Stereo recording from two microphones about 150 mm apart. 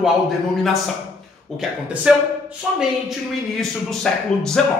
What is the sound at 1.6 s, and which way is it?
A man's voice, 5° right (ahead or behind).